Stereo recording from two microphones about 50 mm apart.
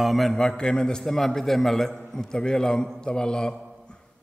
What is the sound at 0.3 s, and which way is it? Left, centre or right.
A man's voice, centre.